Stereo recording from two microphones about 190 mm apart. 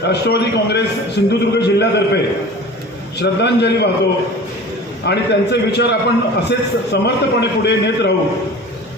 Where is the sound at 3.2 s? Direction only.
65° left (ahead or behind).